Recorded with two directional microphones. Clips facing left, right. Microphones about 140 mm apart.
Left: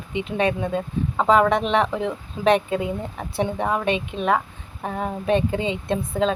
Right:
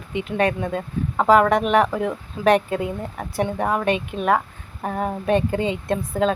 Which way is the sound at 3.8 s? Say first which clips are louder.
Right 1 dB; 20° left (ahead or behind).